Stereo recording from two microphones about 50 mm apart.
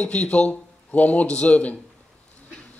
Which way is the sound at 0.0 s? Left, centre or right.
Left.